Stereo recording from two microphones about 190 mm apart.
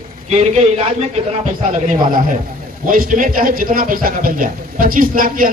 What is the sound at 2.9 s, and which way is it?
Speech, 45° right (ahead or behind).